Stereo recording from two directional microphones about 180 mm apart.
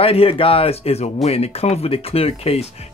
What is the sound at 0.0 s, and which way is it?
Speech, 30° left (ahead or behind).